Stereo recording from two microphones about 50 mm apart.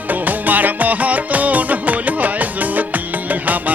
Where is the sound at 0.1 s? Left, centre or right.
Right.